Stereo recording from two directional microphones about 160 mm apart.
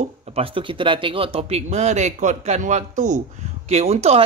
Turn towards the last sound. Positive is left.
turn(degrees=-40)  # may be behind; listen again after turning